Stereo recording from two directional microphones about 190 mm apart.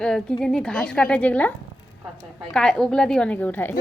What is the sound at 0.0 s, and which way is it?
A woman's voice, 5° left (ahead or behind).